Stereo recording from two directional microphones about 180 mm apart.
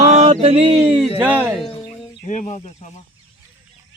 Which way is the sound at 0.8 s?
5° right (ahead or behind).